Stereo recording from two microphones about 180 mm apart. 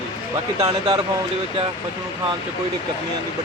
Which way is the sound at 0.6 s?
25° right (ahead or behind).